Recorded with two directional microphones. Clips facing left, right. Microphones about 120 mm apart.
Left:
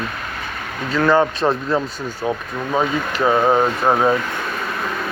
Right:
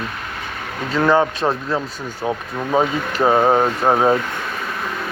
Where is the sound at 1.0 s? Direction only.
15° right (ahead or behind).